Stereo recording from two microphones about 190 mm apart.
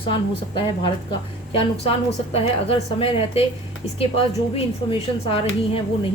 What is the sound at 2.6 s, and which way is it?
A woman's voice, 30° left (ahead or behind).